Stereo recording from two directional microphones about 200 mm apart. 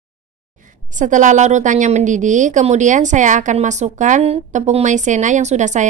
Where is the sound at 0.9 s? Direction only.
40° right (ahead or behind).